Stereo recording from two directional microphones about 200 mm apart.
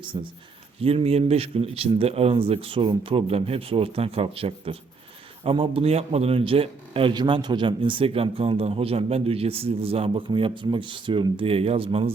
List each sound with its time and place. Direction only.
0.1 s a man's voice: 25° right (ahead or behind)